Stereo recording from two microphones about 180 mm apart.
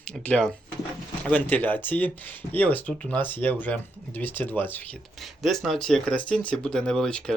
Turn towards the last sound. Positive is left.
turn(degrees=5)  # may be behind; listen again after turning